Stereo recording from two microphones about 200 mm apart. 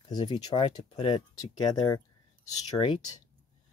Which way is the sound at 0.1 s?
25° left (ahead or behind).